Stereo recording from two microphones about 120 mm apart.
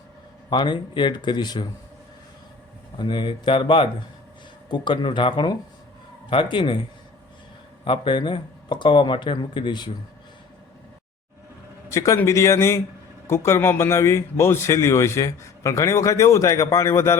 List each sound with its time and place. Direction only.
0.5 s speech: 40° left (ahead or behind)
3.0 s speech: 40° left (ahead or behind)
7.9 s speech: 45° left (ahead or behind)
11.9 s a man's voice: 25° left (ahead or behind)